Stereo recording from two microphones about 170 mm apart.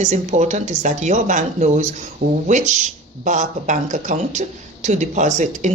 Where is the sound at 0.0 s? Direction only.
45° right (ahead or behind).